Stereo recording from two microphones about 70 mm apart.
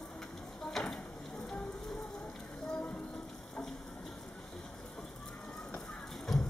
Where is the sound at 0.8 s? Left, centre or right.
Centre.